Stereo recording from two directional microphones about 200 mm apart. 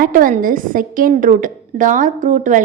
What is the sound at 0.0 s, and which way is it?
A woman's voice, 45° right (ahead or behind).